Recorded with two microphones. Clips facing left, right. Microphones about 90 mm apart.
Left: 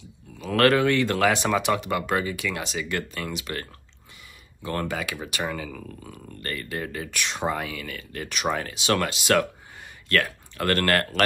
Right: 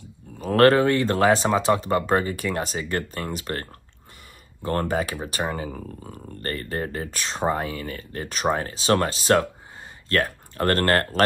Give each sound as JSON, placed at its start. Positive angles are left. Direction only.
{"t": 0.3, "sound": "speech", "side_deg": -40}
{"t": 4.6, "sound": "speech", "side_deg": -40}